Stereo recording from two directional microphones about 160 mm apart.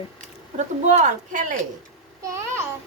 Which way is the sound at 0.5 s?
50° right (ahead or behind).